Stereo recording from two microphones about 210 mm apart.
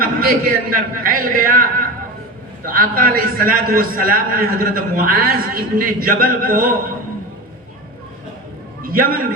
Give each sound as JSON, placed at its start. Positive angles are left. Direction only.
{"t": 0.0, "sound": "a man's voice", "side_deg": -45}
{"t": 8.8, "sound": "a man's voice", "side_deg": -45}